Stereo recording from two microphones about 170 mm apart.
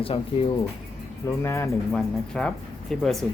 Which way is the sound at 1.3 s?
15° left (ahead or behind).